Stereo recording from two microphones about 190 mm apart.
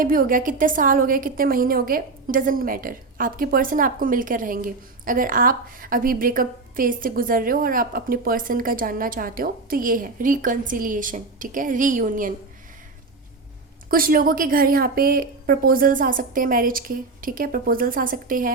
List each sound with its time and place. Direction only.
0.0 s a woman's voice: 45° right (ahead or behind)
13.9 s a woman's voice: 50° right (ahead or behind)